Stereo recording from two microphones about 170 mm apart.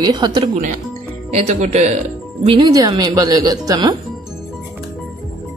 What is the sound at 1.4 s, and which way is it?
Speech, 40° right (ahead or behind).